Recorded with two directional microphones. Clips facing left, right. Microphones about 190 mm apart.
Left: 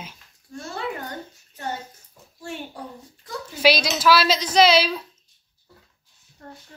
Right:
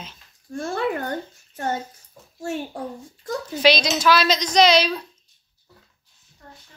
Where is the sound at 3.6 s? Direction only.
5° left (ahead or behind).